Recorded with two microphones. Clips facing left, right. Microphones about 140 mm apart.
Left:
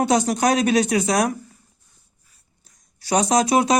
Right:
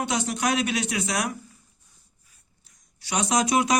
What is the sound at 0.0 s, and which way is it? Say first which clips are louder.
Speech: left 8 dB; 40° left (ahead or behind).